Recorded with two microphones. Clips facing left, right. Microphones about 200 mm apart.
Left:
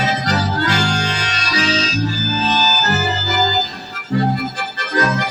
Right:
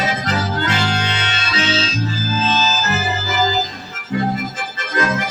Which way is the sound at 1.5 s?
35° left (ahead or behind).